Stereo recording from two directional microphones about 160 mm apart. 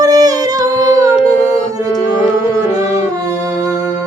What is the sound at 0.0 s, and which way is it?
Singing, 25° right (ahead or behind).